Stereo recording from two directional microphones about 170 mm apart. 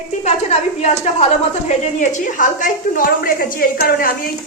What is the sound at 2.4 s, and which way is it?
A woman's voice, 50° left (ahead or behind).